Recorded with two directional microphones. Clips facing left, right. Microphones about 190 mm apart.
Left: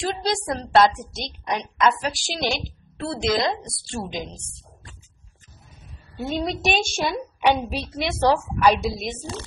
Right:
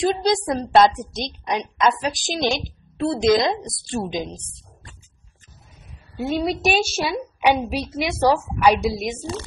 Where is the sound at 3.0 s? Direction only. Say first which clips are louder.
Right 6 dB; 15° right (ahead or behind).